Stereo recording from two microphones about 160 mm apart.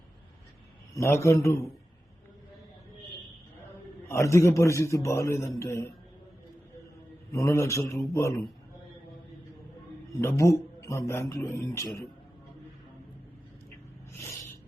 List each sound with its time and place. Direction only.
0.9 s a man's voice: 15° left (ahead or behind)
4.1 s a man's voice: 15° left (ahead or behind)
7.3 s a man's voice: 20° left (ahead or behind)
10.2 s a man's voice: 20° left (ahead or behind)
14.2 s a sound: 15° left (ahead or behind)